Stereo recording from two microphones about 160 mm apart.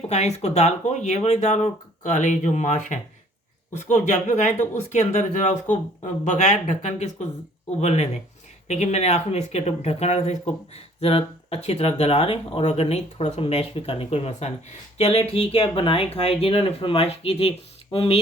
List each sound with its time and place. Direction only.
0.1 s speech: 45° left (ahead or behind)